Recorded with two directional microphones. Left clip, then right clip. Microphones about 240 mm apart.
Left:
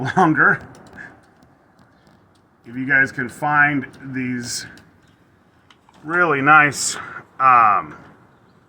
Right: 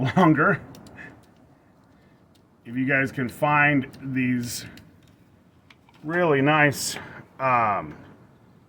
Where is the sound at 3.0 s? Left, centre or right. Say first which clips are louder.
Left 6 dB; right.